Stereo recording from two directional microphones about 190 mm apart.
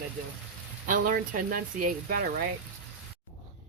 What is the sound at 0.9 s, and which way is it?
Speech, 45° right (ahead or behind).